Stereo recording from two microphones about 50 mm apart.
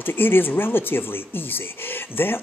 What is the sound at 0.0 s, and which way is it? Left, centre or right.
Speech, left.